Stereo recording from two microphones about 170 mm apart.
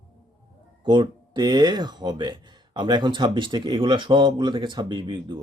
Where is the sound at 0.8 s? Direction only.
25° right (ahead or behind).